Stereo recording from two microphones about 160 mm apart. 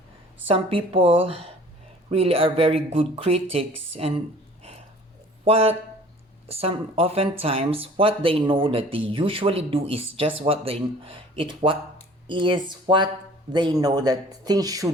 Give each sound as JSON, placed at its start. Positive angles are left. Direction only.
{"t": 0.4, "sound": "speech", "side_deg": -35}
{"t": 5.5, "sound": "speech", "side_deg": -40}